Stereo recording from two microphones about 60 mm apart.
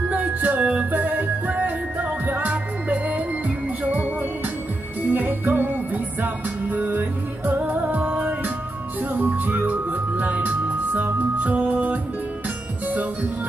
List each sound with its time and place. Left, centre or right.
0.1 s music: right